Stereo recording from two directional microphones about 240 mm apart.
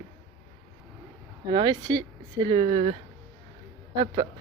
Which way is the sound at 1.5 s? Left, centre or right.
Centre.